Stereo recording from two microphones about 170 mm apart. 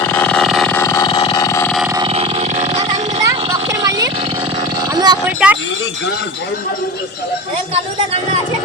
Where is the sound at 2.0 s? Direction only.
35° right (ahead or behind).